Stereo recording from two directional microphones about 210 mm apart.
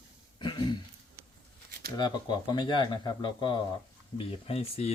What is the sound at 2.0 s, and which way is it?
Speech, 20° left (ahead or behind).